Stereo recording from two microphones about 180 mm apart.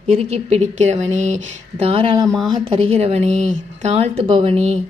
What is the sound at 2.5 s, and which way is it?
Speech, 30° right (ahead or behind).